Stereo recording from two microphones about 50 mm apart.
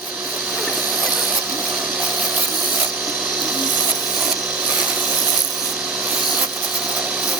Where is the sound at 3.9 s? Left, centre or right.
Centre.